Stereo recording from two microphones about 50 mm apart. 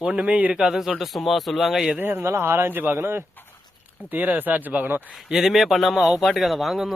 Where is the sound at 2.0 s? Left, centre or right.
Right.